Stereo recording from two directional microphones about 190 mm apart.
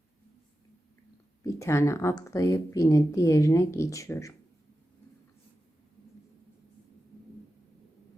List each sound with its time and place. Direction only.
1.5 s speech: 15° left (ahead or behind)